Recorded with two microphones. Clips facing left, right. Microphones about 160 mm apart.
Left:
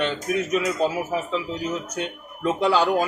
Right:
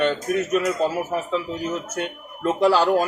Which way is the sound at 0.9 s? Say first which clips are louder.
Right 1 dB; centre (ahead or behind).